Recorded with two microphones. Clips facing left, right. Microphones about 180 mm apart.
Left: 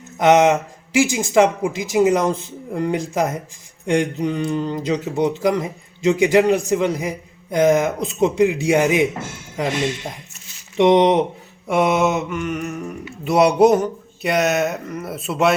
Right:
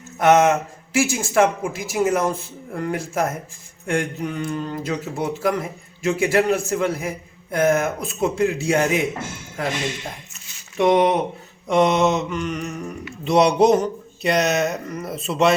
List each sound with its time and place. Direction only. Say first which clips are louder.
0.2 s speech: left 2 dB; 15° left (ahead or behind)
10.8 s speech: left 3 dB; 20° left (ahead or behind)
11.7 s mantra: even; 5° left (ahead or behind)